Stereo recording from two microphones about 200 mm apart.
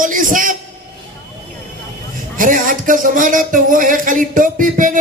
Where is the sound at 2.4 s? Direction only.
40° right (ahead or behind).